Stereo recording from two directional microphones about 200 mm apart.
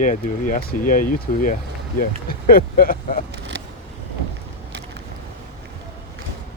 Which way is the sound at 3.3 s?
60° right (ahead or behind).